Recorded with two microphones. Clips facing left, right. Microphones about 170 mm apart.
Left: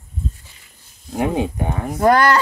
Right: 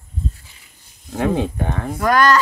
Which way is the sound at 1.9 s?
30° left (ahead or behind).